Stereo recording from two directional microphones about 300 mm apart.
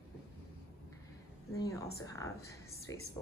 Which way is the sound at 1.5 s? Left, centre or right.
Centre.